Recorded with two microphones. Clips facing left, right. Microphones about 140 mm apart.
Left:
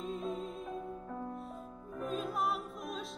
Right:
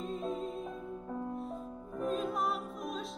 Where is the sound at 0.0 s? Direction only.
Centre (ahead or behind).